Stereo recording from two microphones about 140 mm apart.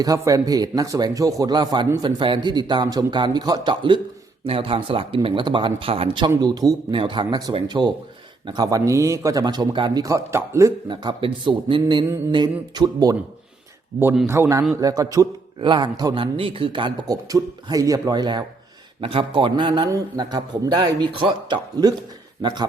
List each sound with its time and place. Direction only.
0.0 s a man's voice: 25° right (ahead or behind)
6.4 s a man's voice: 25° right (ahead or behind)
10.8 s a man's voice: 35° right (ahead or behind)
14.3 s a man's voice: 20° right (ahead or behind)